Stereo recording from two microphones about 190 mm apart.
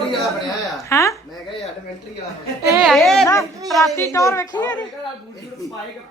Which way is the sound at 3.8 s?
15° left (ahead or behind).